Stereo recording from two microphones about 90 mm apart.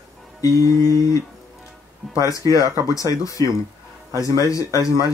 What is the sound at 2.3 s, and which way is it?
Speech, 40° left (ahead or behind).